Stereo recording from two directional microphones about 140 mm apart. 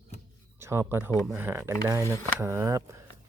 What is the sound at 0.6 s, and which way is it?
Speech, 20° right (ahead or behind).